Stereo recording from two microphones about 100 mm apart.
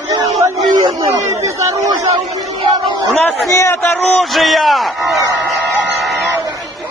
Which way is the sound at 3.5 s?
30° left (ahead or behind).